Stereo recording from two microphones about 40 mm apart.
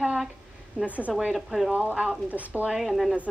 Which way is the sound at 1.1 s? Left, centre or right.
Centre.